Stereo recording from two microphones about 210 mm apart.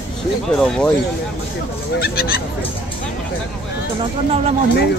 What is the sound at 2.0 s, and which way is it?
Speech, 45° left (ahead or behind).